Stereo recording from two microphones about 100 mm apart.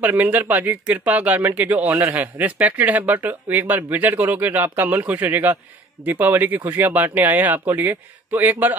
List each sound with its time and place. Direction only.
0.0 s speech: 15° right (ahead or behind)